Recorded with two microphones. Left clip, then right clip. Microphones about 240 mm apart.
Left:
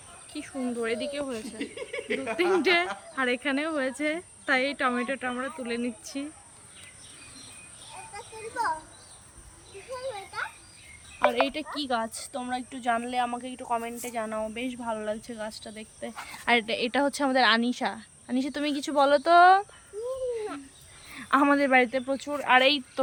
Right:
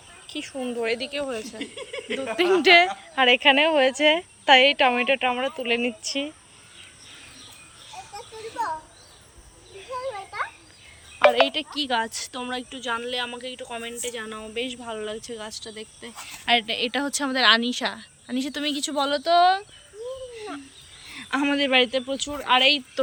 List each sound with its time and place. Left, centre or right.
0.3 s speech: centre
11.3 s a woman's voice: centre
21.1 s speech: centre